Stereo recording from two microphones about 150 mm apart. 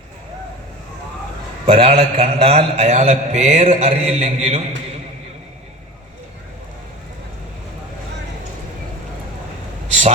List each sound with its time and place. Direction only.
1.6 s a man's voice: 40° right (ahead or behind)